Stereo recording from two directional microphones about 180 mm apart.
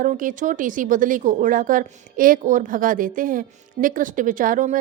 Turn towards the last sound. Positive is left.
turn(degrees=-45)  # may be behind; listen again after turning